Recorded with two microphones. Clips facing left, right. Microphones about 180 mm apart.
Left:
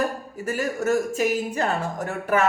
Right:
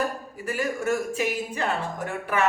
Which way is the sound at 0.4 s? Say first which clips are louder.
Left 2 dB; 40° left (ahead or behind).